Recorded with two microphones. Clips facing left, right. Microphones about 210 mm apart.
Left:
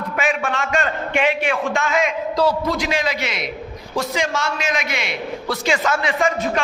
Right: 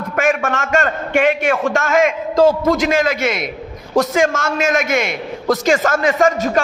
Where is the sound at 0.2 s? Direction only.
45° right (ahead or behind).